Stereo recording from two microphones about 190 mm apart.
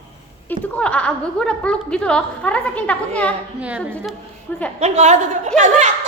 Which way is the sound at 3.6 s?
5° right (ahead or behind).